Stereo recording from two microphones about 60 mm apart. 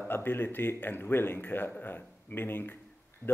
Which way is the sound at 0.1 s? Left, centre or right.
Left.